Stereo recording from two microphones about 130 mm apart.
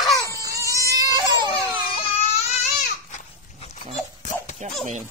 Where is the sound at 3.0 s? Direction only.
65° left (ahead or behind).